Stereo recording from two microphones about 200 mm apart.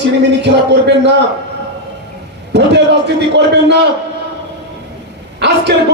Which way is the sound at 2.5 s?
60° right (ahead or behind).